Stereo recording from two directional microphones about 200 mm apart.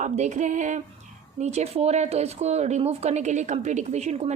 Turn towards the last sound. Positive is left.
turn(degrees=-35)  # may be behind; listen again after turning